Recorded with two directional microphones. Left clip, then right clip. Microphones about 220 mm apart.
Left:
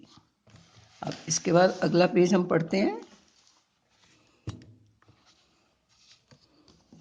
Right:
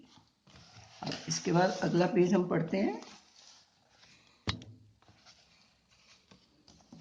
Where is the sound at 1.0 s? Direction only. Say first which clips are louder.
Left 5 dB; 45° left (ahead or behind).